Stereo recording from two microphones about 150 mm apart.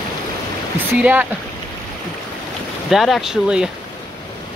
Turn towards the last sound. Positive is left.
turn(degrees=-5)  # may be behind; listen again after turning